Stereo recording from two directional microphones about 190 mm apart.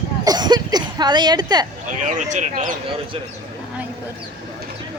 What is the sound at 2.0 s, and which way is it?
Speech, 40° right (ahead or behind).